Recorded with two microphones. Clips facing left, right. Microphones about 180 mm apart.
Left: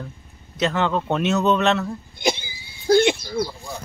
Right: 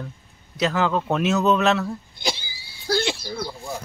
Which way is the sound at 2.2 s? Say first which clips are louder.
Left 6 dB; 20° left (ahead or behind).